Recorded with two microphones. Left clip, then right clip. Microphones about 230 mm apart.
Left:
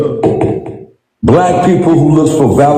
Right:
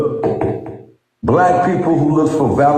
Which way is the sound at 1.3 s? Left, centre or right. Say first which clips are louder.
Left 4 dB; left.